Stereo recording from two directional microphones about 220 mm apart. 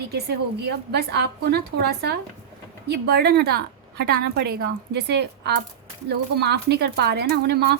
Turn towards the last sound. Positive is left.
turn(degrees=-45)  # may be behind; listen again after turning